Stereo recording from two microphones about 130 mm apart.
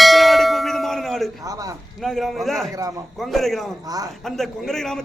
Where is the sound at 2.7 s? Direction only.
25° right (ahead or behind).